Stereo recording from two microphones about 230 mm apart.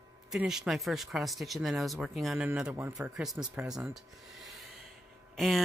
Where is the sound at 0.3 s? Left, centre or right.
Centre.